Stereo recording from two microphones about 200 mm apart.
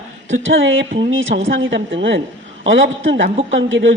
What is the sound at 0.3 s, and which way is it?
A woman's voice, 75° right (ahead or behind).